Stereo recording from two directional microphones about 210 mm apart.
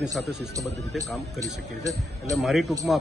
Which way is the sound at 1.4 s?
15° right (ahead or behind).